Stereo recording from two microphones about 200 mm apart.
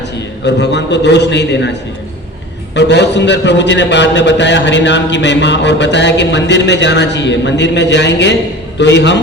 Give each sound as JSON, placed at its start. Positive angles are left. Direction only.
{"t": 0.4, "sound": "a man's voice", "side_deg": 60}